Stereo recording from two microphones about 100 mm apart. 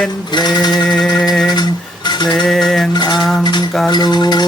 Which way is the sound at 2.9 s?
45° left (ahead or behind).